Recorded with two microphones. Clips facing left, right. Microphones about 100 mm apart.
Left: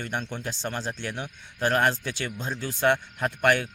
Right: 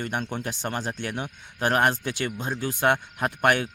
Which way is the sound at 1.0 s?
55° right (ahead or behind).